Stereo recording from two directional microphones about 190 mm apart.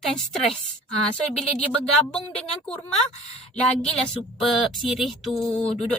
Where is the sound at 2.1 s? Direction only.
5° left (ahead or behind).